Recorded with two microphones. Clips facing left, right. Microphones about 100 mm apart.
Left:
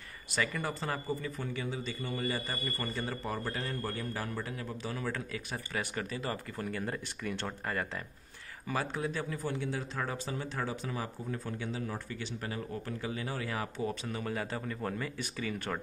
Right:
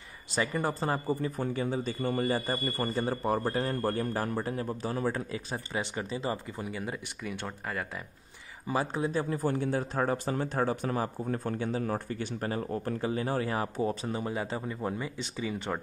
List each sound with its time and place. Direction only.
0.3 s a man's voice: 30° right (ahead or behind)
5.1 s speech: 25° right (ahead or behind); by 8.0 s 5° right (ahead or behind)
8.6 s speech: 25° right (ahead or behind)
9.5 s speech: 45° right (ahead or behind)
14.2 s speech: 20° right (ahead or behind)